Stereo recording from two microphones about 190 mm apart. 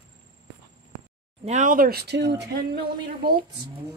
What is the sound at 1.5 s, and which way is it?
Speech, 40° right (ahead or behind).